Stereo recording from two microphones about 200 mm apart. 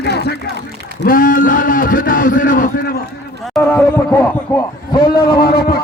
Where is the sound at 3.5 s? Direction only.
10° left (ahead or behind).